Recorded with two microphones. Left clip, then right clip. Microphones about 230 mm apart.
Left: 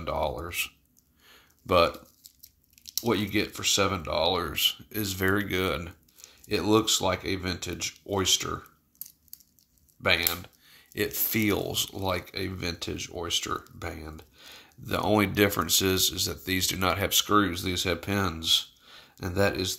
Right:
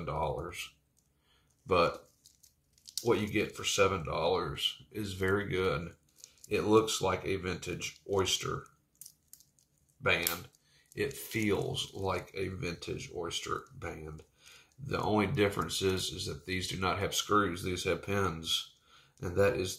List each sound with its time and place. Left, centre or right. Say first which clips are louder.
0.0 s speech: left 5 dB; left
1.2 s a sound: left 8 dB; left
3.1 s speech: left 3 dB; left
10.0 s speech: left 5 dB; left